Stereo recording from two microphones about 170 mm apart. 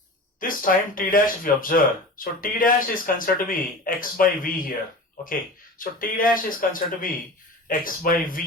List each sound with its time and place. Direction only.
0.3 s speech: 55° left (ahead or behind)
5.8 s speech: 55° left (ahead or behind)